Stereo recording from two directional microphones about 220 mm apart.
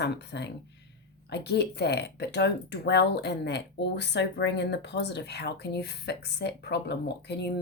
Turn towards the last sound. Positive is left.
turn(degrees=50)  # may be behind; listen again after turning